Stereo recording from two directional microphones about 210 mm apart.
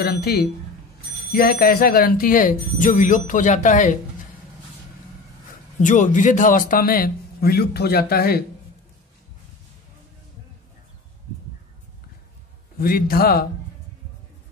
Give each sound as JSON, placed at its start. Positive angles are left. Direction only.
{"t": 0.0, "sound": "a man's voice", "side_deg": 50}
{"t": 5.8, "sound": "a man's voice", "side_deg": 35}
{"t": 12.7, "sound": "a man's voice", "side_deg": 45}